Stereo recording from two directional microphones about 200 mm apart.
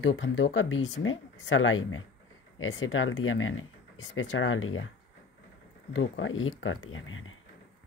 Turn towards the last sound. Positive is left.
turn(degrees=80)